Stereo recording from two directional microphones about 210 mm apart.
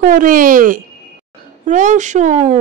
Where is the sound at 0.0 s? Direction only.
40° right (ahead or behind).